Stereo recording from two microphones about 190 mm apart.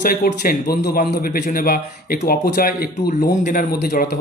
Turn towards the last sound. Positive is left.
turn(degrees=55)  # may be behind; listen again after turning